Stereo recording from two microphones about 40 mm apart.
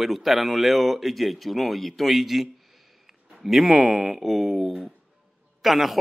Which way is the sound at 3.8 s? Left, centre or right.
Right.